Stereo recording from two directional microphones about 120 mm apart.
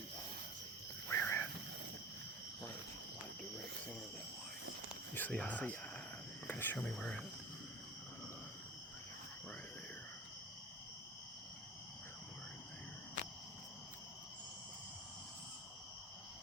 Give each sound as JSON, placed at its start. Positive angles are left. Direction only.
{"t": 1.1, "sound": "cricket", "side_deg": 20}
{"t": 5.1, "sound": "speech", "side_deg": 10}
{"t": 6.5, "sound": "cricket", "side_deg": 15}
{"t": 6.7, "sound": "speech", "side_deg": 5}